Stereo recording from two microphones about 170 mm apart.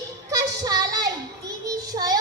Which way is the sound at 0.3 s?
20° right (ahead or behind).